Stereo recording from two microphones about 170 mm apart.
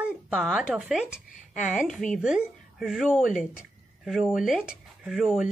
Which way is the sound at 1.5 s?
50° left (ahead or behind).